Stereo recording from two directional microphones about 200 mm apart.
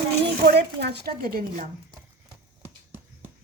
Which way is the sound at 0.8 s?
55° right (ahead or behind).